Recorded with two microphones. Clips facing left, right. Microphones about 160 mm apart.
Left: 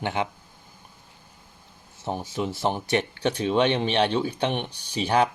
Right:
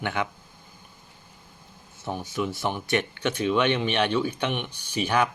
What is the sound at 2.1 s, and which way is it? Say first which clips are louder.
Speech: left 1 dB; 30° left (ahead or behind).